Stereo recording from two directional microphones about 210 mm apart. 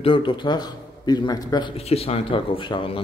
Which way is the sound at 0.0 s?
25° left (ahead or behind).